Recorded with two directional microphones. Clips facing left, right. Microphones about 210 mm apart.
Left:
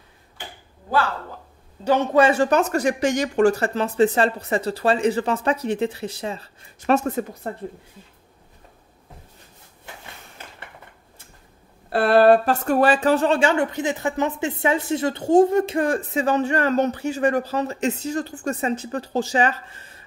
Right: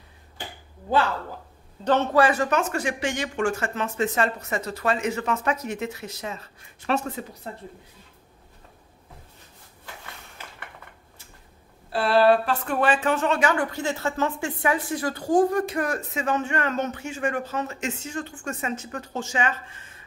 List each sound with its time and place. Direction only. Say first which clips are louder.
2.1 s speech: left 7 dB; 25° left (ahead or behind)
6.9 s speech: left 6 dB; 50° left (ahead or behind)
11.9 s speech: left 4 dB; 55° left (ahead or behind); by 20.0 s 35° left (ahead or behind)